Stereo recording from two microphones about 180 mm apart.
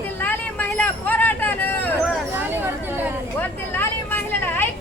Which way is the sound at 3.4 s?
10° left (ahead or behind).